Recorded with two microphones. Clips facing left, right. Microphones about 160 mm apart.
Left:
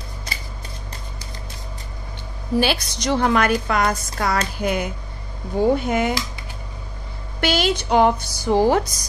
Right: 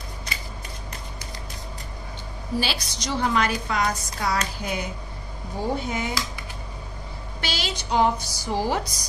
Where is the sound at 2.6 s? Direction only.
60° left (ahead or behind).